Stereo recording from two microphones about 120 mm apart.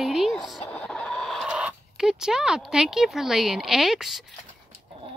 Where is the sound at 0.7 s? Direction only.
10° left (ahead or behind).